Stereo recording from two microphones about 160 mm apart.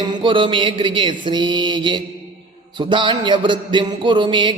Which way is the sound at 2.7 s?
30° right (ahead or behind).